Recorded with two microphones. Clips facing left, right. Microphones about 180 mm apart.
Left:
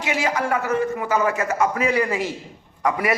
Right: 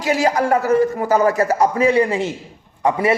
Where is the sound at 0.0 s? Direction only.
40° right (ahead or behind).